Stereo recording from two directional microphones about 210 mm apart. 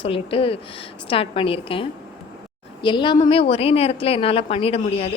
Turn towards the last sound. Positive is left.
turn(degrees=30)  # may be behind; listen again after turning